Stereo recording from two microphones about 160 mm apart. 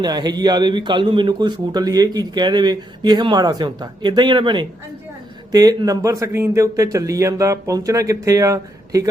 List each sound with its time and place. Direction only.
0.0 s a man's voice: 25° right (ahead or behind)